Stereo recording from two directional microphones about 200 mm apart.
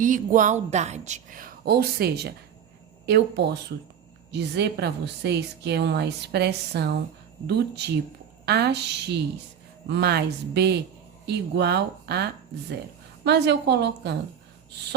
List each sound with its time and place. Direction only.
0.0 s a woman's voice: 40° right (ahead or behind); by 14.2 s 55° right (ahead or behind)